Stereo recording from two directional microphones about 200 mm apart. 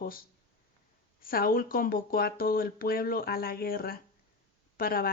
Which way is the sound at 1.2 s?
45° left (ahead or behind).